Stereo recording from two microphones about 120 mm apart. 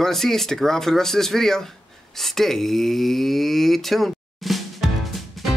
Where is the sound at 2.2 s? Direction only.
Centre (ahead or behind).